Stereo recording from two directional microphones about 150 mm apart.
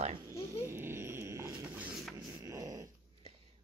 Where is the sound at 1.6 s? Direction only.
10° right (ahead or behind).